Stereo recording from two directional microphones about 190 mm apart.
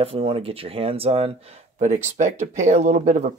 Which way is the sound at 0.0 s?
30° right (ahead or behind).